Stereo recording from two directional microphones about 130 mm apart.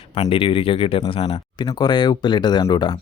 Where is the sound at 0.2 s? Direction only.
45° left (ahead or behind).